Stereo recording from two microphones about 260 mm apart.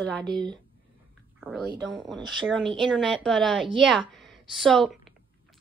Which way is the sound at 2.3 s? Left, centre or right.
Centre.